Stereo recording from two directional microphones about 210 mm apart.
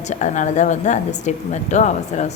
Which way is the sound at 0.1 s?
35° left (ahead or behind).